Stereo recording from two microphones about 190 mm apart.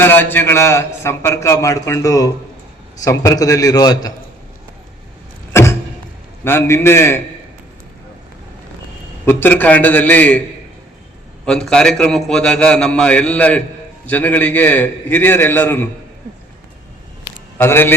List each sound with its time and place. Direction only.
0.0 s a man's voice: 10° left (ahead or behind)
5.5 s a sound: 15° left (ahead or behind)
6.4 s a man's voice: 10° left (ahead or behind)
9.2 s a man's voice: 10° left (ahead or behind)
11.4 s a man's voice: 5° left (ahead or behind)
17.6 s a man's voice: 10° left (ahead or behind)